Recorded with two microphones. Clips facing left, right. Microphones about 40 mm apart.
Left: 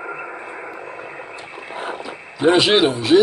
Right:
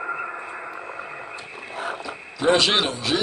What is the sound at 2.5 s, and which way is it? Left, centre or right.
Speech, centre.